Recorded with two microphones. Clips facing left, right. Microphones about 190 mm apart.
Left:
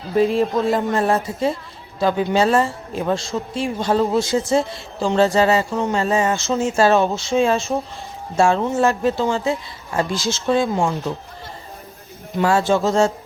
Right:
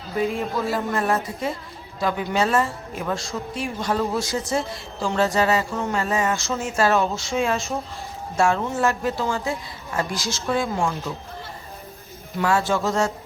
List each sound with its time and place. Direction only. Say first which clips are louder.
0.3 s speech: left 7 dB; 35° left (ahead or behind)
12.4 s speech: left 4 dB; 30° left (ahead or behind)